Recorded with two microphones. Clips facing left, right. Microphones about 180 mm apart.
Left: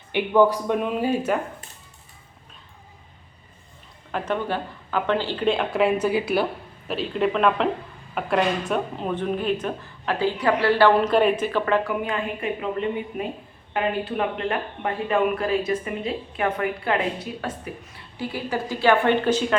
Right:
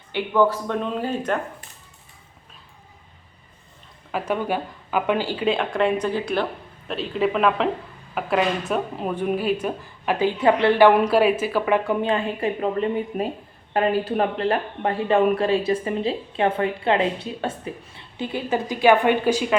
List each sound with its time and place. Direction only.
0.1 s speech: 15° left (ahead or behind)
4.1 s speech: 10° right (ahead or behind)
11.9 s speech: 30° right (ahead or behind); by 19.5 s 10° right (ahead or behind)